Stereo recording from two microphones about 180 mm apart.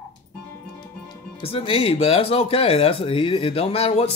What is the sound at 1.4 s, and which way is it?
Speech, 30° left (ahead or behind).